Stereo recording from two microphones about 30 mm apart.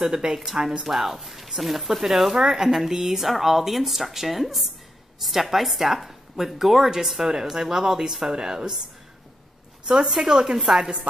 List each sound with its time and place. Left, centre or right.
0.0 s a woman's voice: centre
9.8 s speech: centre